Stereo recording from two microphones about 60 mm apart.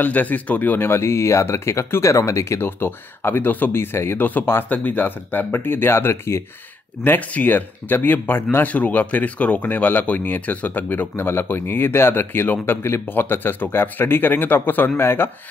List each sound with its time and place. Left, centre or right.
0.0 s speech: left
2.6 s speech: left
7.0 s speech: left